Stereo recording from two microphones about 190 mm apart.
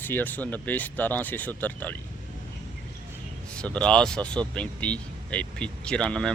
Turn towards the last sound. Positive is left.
turn(degrees=5)  # may be behind; listen again after turning